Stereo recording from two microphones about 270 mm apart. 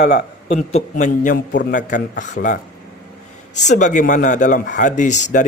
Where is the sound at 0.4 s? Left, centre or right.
Left.